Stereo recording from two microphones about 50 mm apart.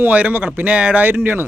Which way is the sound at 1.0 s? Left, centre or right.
Right.